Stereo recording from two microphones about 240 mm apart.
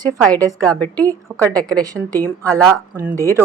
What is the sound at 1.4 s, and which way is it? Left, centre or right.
A woman's voice, centre.